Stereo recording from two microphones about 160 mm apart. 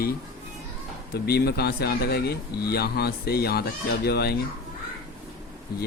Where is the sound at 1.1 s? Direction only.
80° left.